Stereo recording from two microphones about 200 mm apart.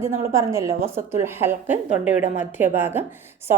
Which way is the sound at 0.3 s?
15° right (ahead or behind).